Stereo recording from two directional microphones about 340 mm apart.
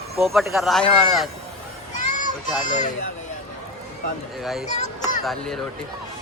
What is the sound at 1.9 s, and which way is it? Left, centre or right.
Children playing, left.